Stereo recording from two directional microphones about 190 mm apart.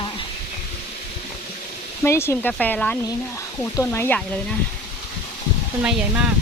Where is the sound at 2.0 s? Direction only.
15° left (ahead or behind).